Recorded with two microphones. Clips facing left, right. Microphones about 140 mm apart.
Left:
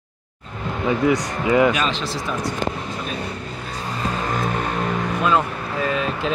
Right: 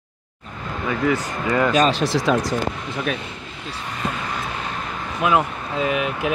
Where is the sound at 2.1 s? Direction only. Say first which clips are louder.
Right 6 dB; 90° right.